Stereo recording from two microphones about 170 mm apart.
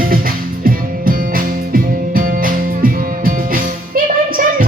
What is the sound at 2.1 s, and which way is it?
Music, 55° right (ahead or behind).